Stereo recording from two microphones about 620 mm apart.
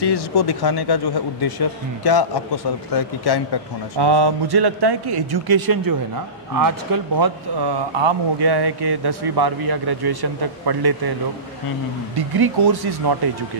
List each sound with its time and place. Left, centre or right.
0.0 s a man's voice: left
4.0 s speech: right
12.2 s speech: right